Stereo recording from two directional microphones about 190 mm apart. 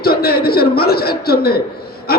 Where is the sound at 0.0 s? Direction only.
55° left (ahead or behind).